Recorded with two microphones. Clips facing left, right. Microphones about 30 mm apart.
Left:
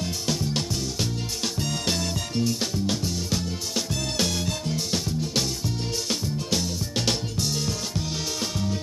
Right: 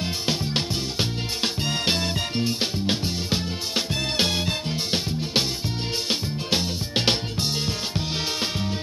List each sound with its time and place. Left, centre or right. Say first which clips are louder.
0.3 s music: right 1 dB; right